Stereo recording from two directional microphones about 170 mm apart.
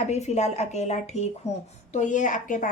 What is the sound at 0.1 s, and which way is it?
A woman's voice, 40° left (ahead or behind).